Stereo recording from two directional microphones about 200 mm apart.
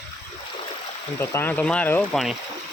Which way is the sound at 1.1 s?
10° left (ahead or behind).